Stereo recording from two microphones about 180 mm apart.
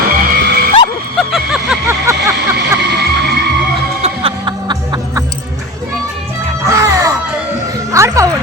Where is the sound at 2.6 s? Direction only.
65° right (ahead or behind).